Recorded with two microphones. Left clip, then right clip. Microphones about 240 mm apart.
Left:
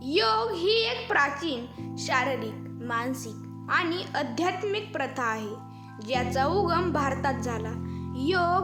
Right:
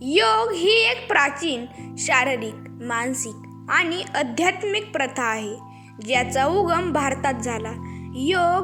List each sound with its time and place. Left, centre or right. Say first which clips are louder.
0.0 s a woman's voice: right 6 dB; centre